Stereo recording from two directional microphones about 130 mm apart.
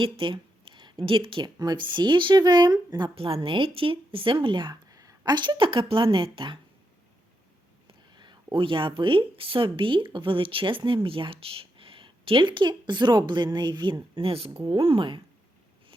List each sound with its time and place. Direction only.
0.0 s speech: 40° right (ahead or behind)
3.2 s speech: 45° right (ahead or behind)
8.1 s speech: 35° right (ahead or behind)